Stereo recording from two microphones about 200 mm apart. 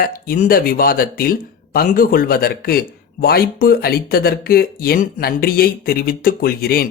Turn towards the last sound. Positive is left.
turn(degrees=50)  # may be behind; listen again after turning